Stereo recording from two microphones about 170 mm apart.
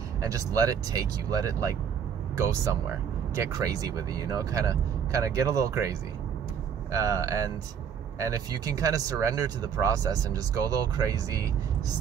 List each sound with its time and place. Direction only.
0.3 s speech: 20° right (ahead or behind)
3.3 s speech: 20° right (ahead or behind)